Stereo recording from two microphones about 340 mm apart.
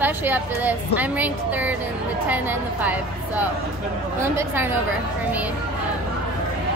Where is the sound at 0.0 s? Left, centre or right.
Centre.